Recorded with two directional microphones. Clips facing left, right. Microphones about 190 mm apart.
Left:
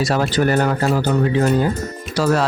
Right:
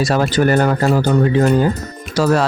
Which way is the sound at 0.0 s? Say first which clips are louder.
Right 3 dB; 50° right (ahead or behind).